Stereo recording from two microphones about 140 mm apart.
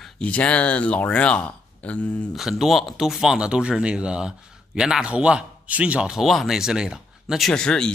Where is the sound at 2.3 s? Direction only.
Centre (ahead or behind).